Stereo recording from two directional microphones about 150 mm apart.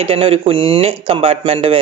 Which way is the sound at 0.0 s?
40° right (ahead or behind).